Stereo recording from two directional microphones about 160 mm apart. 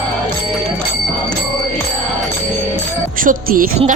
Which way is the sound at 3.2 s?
60° right (ahead or behind).